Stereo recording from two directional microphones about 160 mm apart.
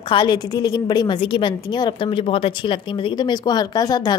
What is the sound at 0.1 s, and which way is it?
A woman's voice, 30° left (ahead or behind).